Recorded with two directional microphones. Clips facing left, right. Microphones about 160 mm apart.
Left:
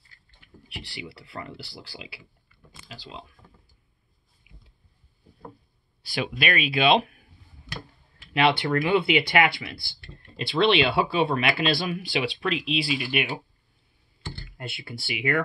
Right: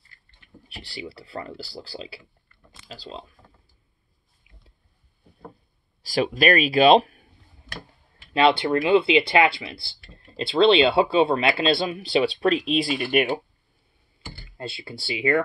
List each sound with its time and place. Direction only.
0.7 s speech: 35° right (ahead or behind)
6.0 s speech: 40° right (ahead or behind)
8.3 s speech: 30° right (ahead or behind)
9.9 s a sound: centre (ahead or behind)
10.3 s speech: 25° right (ahead or behind); by 13.3 s 45° right (ahead or behind)
14.6 s speech: 30° right (ahead or behind)